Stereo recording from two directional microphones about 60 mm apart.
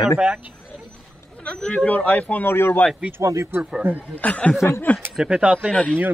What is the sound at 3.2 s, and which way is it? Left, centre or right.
Speech, right.